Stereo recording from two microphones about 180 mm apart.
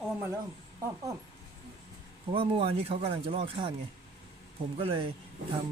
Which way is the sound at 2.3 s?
30° right (ahead or behind).